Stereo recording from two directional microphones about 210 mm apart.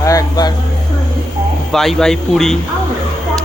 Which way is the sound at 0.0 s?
15° left (ahead or behind).